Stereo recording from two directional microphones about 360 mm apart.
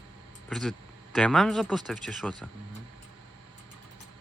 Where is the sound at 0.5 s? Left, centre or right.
Centre.